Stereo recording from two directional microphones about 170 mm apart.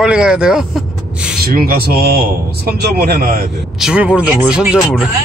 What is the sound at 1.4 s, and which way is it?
Speech, 65° right (ahead or behind).